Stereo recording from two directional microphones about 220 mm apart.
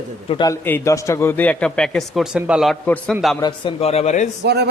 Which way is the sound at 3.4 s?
20° left (ahead or behind).